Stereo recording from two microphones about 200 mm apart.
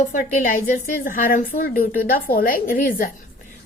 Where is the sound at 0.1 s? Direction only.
40° left (ahead or behind).